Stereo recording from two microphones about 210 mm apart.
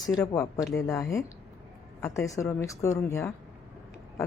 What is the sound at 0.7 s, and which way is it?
Speech, 5° left (ahead or behind).